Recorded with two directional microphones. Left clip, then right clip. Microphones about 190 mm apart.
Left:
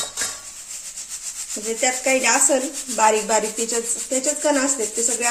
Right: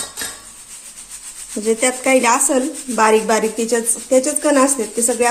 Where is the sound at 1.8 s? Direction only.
50° right (ahead or behind).